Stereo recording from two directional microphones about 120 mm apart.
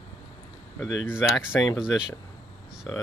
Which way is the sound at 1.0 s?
10° right (ahead or behind).